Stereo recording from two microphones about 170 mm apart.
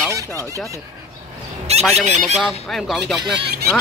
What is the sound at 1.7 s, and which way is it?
Fowl, 40° right (ahead or behind).